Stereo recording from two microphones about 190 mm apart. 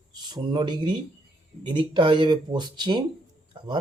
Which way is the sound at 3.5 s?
25° right (ahead or behind).